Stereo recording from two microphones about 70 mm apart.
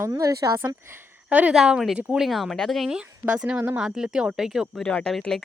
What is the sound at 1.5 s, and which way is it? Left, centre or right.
Speech, centre.